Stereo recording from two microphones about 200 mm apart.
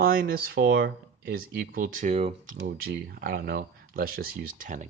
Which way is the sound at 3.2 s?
50° right (ahead or behind).